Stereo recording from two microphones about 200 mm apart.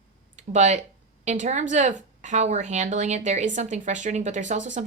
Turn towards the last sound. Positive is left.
turn(degrees=-40)  # may be behind; listen again after turning